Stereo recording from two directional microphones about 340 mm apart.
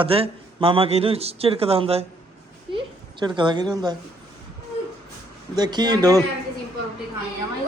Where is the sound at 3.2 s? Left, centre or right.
Centre.